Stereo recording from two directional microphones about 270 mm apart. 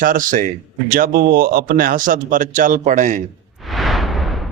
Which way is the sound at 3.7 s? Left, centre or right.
Centre.